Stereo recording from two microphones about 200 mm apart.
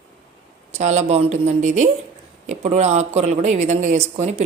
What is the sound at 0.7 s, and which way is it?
Speech, 35° right (ahead or behind).